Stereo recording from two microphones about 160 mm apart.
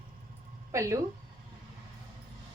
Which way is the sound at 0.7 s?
20° right (ahead or behind).